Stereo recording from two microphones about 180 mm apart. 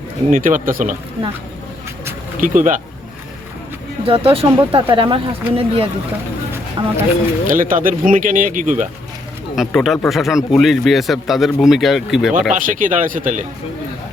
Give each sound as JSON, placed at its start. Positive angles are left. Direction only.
{"t": 0.3, "sound": "speech", "side_deg": -50}
{"t": 2.4, "sound": "speech", "side_deg": -45}
{"t": 4.0, "sound": "speech", "side_deg": -30}
{"t": 7.4, "sound": "speech", "side_deg": -50}
{"t": 9.6, "sound": "speech", "side_deg": 0}
{"t": 12.3, "sound": "speech", "side_deg": -45}